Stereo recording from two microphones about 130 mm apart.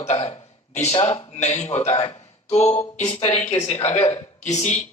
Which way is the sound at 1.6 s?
60° left (ahead or behind).